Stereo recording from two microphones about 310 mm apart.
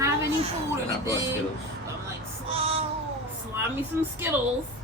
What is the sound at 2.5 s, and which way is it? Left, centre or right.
Child singing, centre.